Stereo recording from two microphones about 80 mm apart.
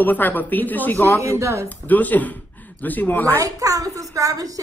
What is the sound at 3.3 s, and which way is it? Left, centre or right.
A woman's voice, right.